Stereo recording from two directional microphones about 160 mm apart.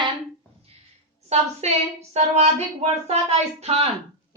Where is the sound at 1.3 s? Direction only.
40° right (ahead or behind).